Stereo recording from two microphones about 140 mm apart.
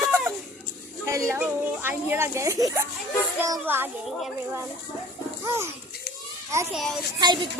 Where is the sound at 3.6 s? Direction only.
15° right (ahead or behind).